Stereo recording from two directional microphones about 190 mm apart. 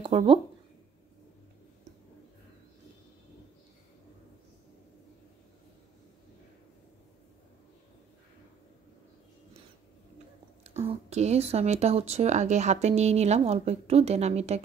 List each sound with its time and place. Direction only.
0.0 s speech: 30° right (ahead or behind)
10.6 s speech: 35° right (ahead or behind)